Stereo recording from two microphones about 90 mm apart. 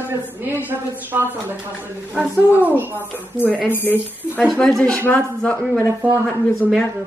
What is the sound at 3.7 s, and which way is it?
Speech, 20° left (ahead or behind).